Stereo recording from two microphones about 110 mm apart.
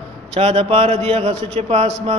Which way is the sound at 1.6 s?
70° right (ahead or behind).